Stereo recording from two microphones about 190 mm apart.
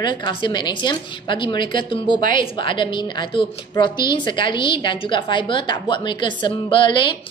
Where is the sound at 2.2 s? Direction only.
45° right (ahead or behind).